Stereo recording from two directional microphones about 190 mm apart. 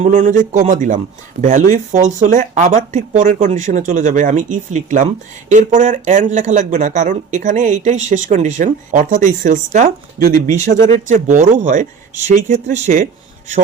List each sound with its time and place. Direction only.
0.0 s speech: 40° right (ahead or behind)